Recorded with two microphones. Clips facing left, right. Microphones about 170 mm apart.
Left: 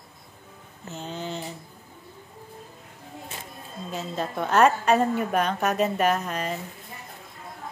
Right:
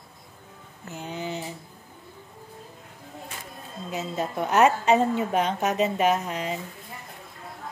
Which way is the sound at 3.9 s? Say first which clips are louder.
Right 1 dB; 10° right (ahead or behind).